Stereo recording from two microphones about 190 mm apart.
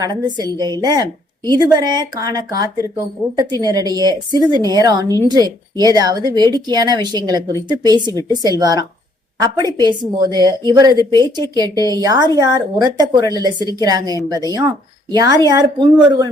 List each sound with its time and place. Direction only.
0.0 s speech: 20° right (ahead or behind)